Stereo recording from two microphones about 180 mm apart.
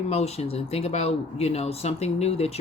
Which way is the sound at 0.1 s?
35° left (ahead or behind).